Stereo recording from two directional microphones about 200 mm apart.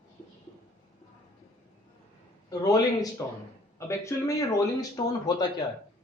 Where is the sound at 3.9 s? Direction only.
15° left (ahead or behind).